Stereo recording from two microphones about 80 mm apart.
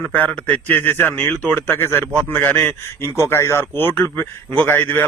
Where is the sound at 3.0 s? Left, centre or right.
Left.